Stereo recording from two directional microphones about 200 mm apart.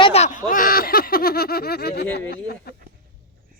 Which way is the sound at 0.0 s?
35° left (ahead or behind).